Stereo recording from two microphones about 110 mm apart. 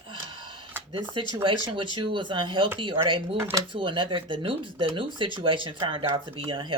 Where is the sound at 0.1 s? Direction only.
45° right (ahead or behind).